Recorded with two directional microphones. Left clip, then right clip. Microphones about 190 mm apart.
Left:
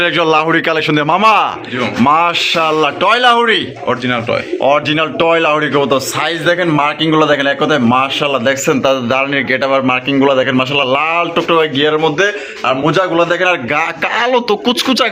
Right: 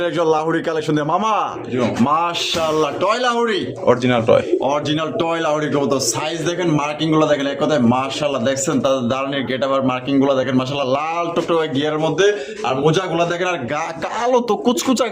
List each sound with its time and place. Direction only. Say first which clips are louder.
0.0 s a man's voice: left 6 dB; 5° left (ahead or behind); by 3.6 s 25° left (ahead or behind)
3.8 s speech: right 4 dB; 45° right (ahead or behind)
4.6 s a man's voice: left 7 dB; 20° left (ahead or behind)
14.2 s speech: left 3 dB; 5° right (ahead or behind)